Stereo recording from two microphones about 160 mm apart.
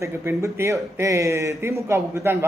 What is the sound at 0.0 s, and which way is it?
A man's voice, 15° right (ahead or behind).